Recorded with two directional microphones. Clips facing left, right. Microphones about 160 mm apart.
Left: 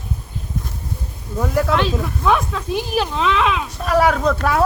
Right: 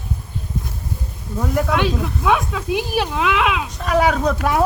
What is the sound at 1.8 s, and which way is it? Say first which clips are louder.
Speech: even; 10° right (ahead or behind).